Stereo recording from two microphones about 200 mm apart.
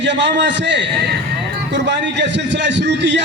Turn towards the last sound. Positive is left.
turn(degrees=-60)  # may be behind; listen again after turning